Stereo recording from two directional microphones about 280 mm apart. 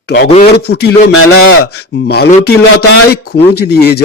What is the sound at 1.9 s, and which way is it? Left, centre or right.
Speech, left.